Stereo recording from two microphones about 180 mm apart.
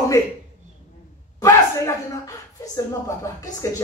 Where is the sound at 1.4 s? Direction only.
20° left (ahead or behind).